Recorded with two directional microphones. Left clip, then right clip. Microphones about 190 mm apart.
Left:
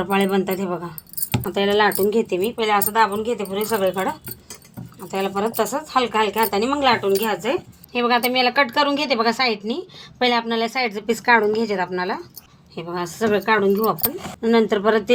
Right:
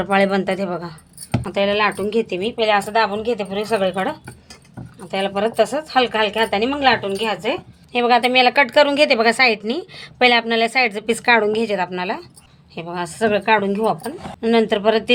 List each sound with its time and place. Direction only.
0.0 s speech: 20° right (ahead or behind)
1.3 s speech: 5° right (ahead or behind)
3.1 s a woman's voice: 30° right (ahead or behind); by 7.3 s 15° right (ahead or behind)
7.9 s a woman's voice: 35° right (ahead or behind); by 15.0 s 20° right (ahead or behind)